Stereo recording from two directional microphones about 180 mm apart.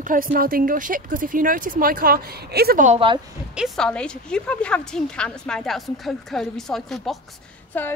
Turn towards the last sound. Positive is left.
turn(degrees=10)  # may be behind; listen again after turning